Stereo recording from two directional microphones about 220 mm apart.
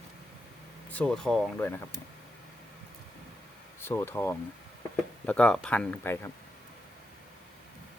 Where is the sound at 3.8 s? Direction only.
10° left (ahead or behind).